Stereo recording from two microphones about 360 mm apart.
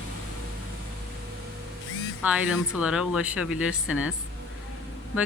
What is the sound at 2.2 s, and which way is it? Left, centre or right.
Speech, centre.